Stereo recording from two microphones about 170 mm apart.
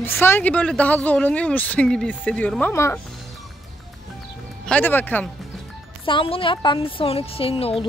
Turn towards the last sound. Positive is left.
turn(degrees=35)  # may be behind; listen again after turning